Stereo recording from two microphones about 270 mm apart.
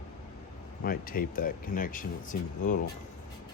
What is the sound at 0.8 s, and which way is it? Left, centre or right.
Speech, left.